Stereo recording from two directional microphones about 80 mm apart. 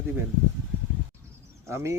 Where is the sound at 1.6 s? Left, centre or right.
Right.